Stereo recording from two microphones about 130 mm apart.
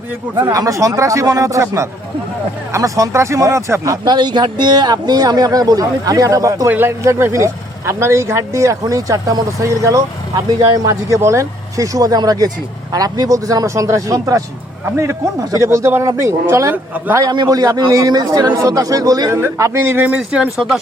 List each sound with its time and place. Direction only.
0.4 s speech: 25° right (ahead or behind)
17.2 s speech: 30° right (ahead or behind); by 20.7 s 5° right (ahead or behind)